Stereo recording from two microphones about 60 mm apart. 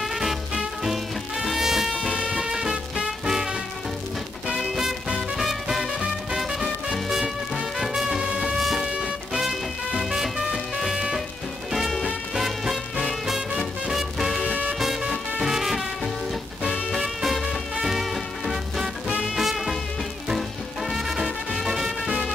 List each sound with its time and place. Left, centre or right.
0.0 s swing music: centre
4.5 s music: centre
9.4 s swing music: centre
11.7 s music: centre
14.5 s music: right
14.8 s music: centre
16.9 s music: centre
19.3 s swing music: centre
20.2 s music: centre